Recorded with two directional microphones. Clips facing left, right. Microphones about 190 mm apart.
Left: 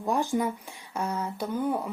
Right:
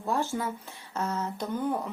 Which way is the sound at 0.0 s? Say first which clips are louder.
Left 3 dB; 15° left (ahead or behind).